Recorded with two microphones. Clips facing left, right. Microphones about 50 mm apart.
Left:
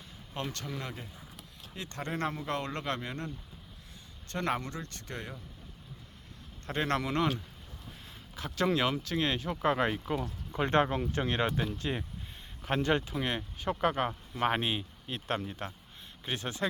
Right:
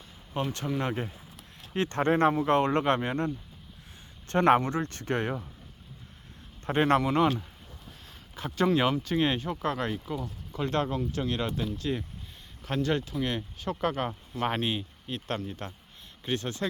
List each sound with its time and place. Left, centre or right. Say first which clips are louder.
0.4 s speech: right 6 dB; centre
0.8 s speech: right 10 dB; right
6.7 s speech: right 7 dB; right
7.0 s speech: right 6 dB; centre
9.5 s speech: left 1 dB; centre
10.5 s speech: left 2 dB; left; by 16.6 s centre